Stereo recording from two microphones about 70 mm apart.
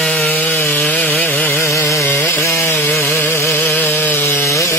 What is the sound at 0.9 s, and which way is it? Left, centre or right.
Sawing, left.